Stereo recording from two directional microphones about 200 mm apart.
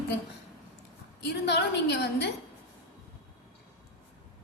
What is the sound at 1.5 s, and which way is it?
Speech, 55° left (ahead or behind).